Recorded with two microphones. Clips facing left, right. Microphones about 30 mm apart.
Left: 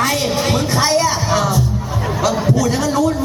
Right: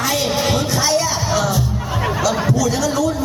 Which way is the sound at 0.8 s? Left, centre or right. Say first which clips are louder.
Left 3 dB; left.